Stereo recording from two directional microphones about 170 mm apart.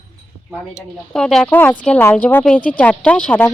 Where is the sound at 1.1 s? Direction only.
5° left (ahead or behind).